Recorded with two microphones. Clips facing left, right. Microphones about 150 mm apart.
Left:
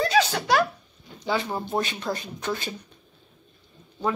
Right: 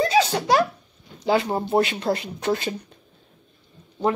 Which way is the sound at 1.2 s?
35° right (ahead or behind).